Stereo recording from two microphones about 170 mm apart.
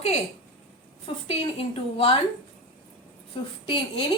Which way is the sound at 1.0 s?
35° left (ahead or behind).